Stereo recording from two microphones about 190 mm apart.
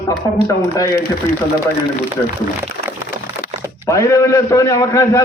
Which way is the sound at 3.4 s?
50° left (ahead or behind).